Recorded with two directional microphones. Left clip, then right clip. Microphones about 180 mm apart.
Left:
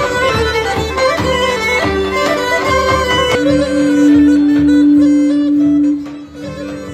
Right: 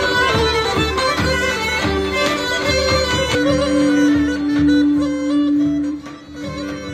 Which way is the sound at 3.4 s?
50° left (ahead or behind).